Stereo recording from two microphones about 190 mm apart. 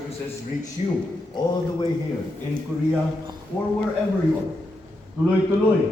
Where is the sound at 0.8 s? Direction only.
35° left (ahead or behind).